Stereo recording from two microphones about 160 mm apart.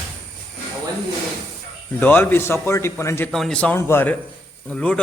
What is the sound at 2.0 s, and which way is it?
A man's voice, 10° left (ahead or behind).